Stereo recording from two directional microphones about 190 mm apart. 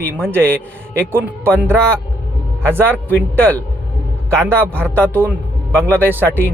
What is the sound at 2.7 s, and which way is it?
Speech, 10° right (ahead or behind).